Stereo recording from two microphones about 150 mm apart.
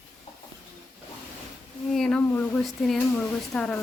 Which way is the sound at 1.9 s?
5° left (ahead or behind).